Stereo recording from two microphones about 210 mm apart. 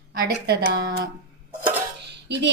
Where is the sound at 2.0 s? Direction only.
55° right (ahead or behind).